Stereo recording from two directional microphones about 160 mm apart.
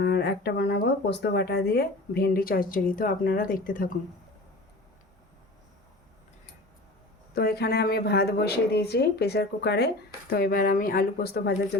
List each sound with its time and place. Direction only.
0.0 s speech: 85° left; by 3.9 s 60° left (ahead or behind)
7.3 s speech: 80° left